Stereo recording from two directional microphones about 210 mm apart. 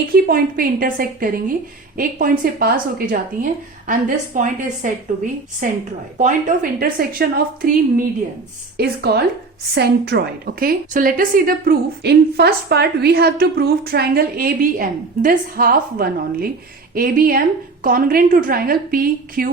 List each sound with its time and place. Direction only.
0.1 s a woman's voice: 45° right (ahead or behind)